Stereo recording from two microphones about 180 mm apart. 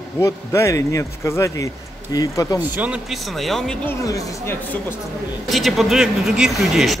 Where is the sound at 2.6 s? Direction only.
10° right (ahead or behind); by 4.8 s 15° left (ahead or behind).